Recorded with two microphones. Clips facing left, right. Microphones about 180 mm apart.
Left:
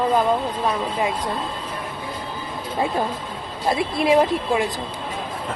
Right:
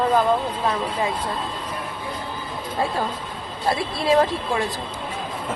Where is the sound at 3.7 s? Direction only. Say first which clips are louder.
Left 2 dB; 15° left (ahead or behind).